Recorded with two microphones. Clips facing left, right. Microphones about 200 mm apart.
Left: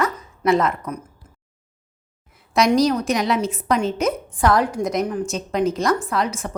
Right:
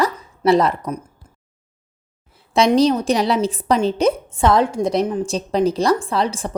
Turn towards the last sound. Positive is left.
turn(degrees=-30)  # may be behind; listen again after turning